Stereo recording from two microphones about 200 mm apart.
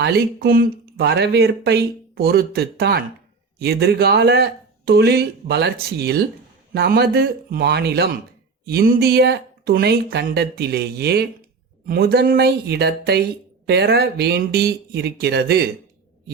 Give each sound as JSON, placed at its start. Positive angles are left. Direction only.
{"t": 0.0, "sound": "speech", "side_deg": -55}